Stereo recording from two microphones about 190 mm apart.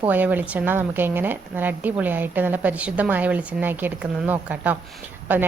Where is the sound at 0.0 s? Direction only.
10° right (ahead or behind).